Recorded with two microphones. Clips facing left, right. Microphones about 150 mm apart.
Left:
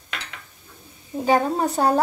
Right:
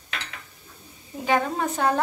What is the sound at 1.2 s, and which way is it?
Speech, 35° left (ahead or behind).